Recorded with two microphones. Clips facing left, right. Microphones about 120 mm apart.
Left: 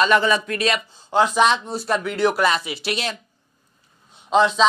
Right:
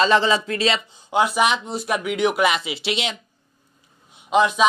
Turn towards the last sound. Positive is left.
turn(degrees=-15)  # may be behind; listen again after turning